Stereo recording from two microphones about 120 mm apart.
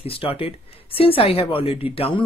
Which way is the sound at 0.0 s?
50° left (ahead or behind).